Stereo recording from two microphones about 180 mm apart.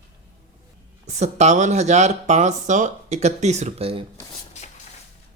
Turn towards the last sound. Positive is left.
turn(degrees=-35)  # may be behind; listen again after turning